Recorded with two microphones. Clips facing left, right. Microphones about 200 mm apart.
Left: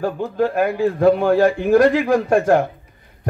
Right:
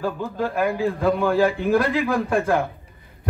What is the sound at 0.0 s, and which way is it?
A man's voice, 55° left (ahead or behind).